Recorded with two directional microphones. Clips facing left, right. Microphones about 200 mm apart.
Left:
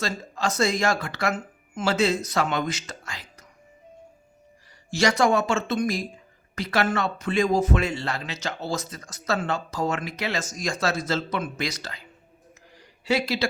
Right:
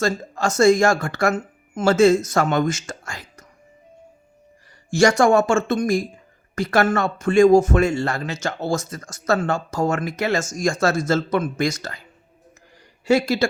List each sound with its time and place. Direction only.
0.0 s speech: 45° right (ahead or behind)
4.9 s speech: 50° right (ahead or behind)
12.7 s a sound: 45° right (ahead or behind)